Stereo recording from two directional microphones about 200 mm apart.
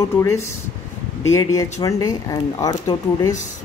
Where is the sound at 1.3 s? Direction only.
15° left (ahead or behind).